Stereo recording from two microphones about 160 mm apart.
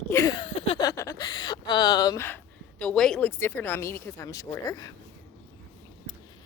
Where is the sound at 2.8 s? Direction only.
5° left (ahead or behind); by 4.9 s 25° left (ahead or behind).